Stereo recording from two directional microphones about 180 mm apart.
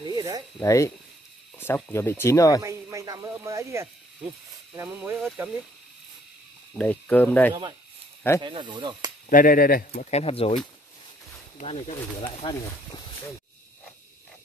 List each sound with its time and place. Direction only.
0.0 s zipper: 20° right (ahead or behind)
0.6 s speech: 15° left (ahead or behind)
2.6 s speech: 15° right (ahead or behind)
6.8 s speech: 10° left (ahead or behind)
8.4 s speech: 25° right (ahead or behind)
9.3 s speech: 50° left (ahead or behind)
10.1 s speech: 30° left (ahead or behind)